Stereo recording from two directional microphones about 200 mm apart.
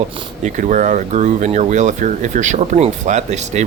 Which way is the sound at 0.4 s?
40° right (ahead or behind).